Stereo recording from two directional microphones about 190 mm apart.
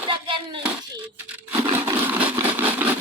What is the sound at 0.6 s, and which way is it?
Speech, 10° right (ahead or behind).